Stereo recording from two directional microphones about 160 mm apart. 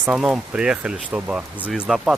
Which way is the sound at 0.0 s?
5° right (ahead or behind).